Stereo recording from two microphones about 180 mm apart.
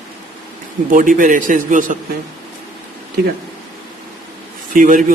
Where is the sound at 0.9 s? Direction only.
50° right (ahead or behind).